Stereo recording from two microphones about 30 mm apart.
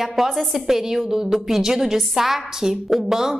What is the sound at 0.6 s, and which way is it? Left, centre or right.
A woman's voice, centre.